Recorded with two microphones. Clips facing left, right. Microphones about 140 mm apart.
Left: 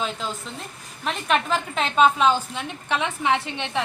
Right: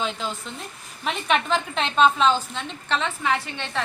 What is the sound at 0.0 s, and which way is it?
A woman's voice, centre (ahead or behind).